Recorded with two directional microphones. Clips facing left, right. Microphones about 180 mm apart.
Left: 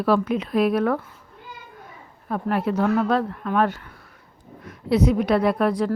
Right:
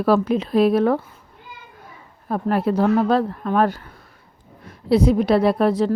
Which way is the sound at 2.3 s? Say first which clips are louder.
Right 3 dB; 35° right (ahead or behind).